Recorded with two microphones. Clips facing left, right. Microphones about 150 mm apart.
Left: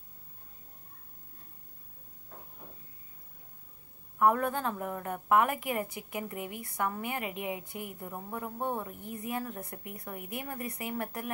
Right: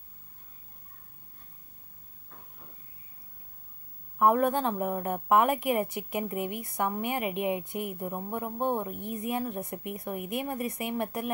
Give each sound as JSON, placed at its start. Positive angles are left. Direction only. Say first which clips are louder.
{"t": 4.2, "sound": "a woman's voice", "louder": "right 3 dB", "side_deg": -20}